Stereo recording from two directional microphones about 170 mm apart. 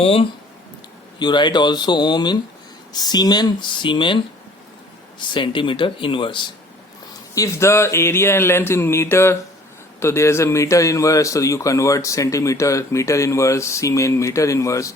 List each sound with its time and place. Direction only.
0.0 s speech: 35° left (ahead or behind)
5.3 s speech: 30° left (ahead or behind)
7.3 s a man's voice: 15° left (ahead or behind)